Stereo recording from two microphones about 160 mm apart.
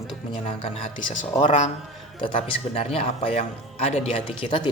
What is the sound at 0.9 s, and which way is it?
Speech, 50° left (ahead or behind).